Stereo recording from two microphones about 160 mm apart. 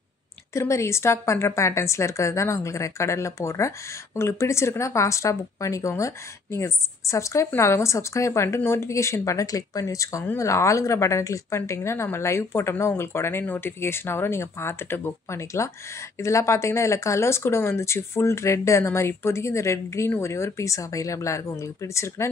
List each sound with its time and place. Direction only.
0.6 s a woman's voice: 20° left (ahead or behind)